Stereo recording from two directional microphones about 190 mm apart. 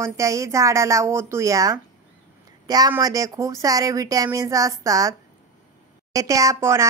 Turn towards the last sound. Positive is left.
turn(degrees=-15)  # may be behind; listen again after turning